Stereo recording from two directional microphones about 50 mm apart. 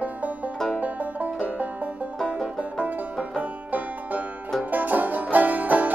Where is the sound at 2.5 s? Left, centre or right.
Right.